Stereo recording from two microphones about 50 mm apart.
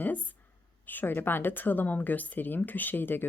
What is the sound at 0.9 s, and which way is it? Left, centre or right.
A woman's voice, left.